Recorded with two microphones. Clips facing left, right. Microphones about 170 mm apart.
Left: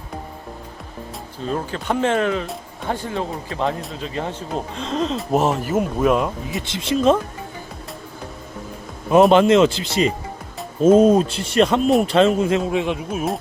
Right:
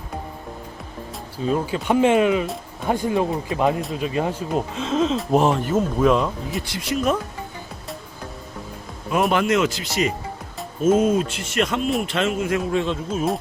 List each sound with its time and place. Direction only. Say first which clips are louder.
1.5 s speech: right 3 dB; 10° right (ahead or behind)
6.5 s speech: left 3 dB; 20° left (ahead or behind)
9.1 s speech: left 7 dB; 25° left (ahead or behind)